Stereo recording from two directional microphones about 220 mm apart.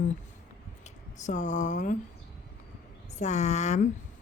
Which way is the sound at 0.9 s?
35° left (ahead or behind).